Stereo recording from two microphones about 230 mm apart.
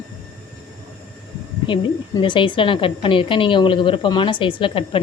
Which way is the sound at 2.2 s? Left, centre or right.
Left.